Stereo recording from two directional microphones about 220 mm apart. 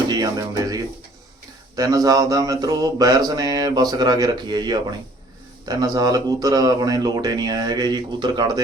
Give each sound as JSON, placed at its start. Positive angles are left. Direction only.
{"t": 0.1, "sound": "speech", "side_deg": -15}
{"t": 1.7, "sound": "mantra", "side_deg": -15}